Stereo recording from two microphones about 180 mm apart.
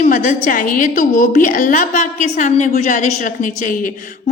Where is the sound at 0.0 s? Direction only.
45° left (ahead or behind).